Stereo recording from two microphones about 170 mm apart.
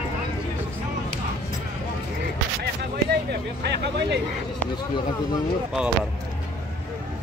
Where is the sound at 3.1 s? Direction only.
80° right.